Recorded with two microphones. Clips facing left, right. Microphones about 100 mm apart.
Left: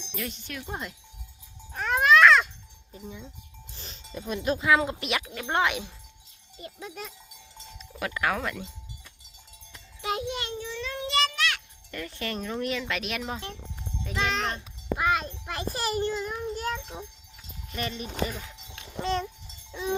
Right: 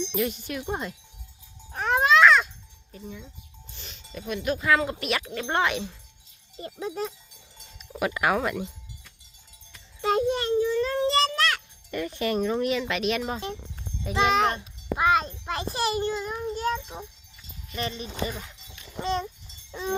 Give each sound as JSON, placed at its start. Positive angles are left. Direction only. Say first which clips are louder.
{"t": 0.1, "sound": "a child's voice", "louder": "right 8 dB", "side_deg": -10}
{"t": 1.7, "sound": "music", "louder": "even", "side_deg": -30}
{"t": 2.2, "sound": "music", "louder": "right 1 dB", "side_deg": 0}
{"t": 2.9, "sound": "speech", "louder": "right 1 dB", "side_deg": 25}
{"t": 3.7, "sound": "speech", "louder": "left 1 dB", "side_deg": 35}
{"t": 4.6, "sound": "speech", "louder": "even", "side_deg": 15}
{"t": 5.2, "sound": "speech", "louder": "even", "side_deg": 5}
{"t": 6.6, "sound": "speech", "louder": "right 8 dB", "side_deg": -35}
{"t": 7.8, "sound": "speech", "louder": "right 4 dB", "side_deg": -15}
{"t": 10.0, "sound": "a sound", "louder": "right 7 dB", "side_deg": -40}
{"t": 11.9, "sound": "a child's voice", "louder": "right 7 dB", "side_deg": -15}
{"t": 13.3, "sound": "a child's voice", "louder": "right 4 dB", "side_deg": -20}
{"t": 15.1, "sound": "a child's voice", "louder": "right 4 dB", "side_deg": -20}
{"t": 18.3, "sound": "a child's voice", "louder": "right 2 dB", "side_deg": -10}